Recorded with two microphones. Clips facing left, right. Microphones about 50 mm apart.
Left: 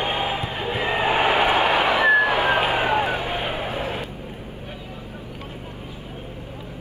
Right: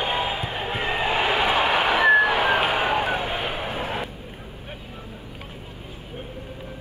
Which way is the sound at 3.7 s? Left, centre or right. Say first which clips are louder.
Left 1 dB; right.